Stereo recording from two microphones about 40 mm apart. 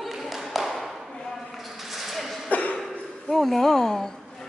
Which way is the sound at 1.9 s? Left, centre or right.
Centre.